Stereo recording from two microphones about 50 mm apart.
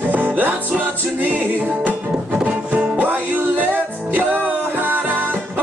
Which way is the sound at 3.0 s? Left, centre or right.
Right.